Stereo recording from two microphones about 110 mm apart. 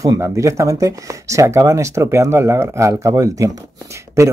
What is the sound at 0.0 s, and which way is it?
Speech, 30° right (ahead or behind).